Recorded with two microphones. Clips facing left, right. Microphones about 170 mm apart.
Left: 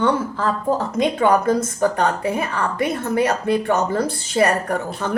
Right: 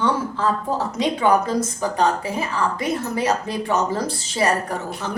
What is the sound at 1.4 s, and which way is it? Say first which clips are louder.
A woman's voice: left 4 dB; 60° left (ahead or behind).